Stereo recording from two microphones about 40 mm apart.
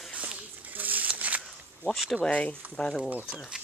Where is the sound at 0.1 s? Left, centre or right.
Right.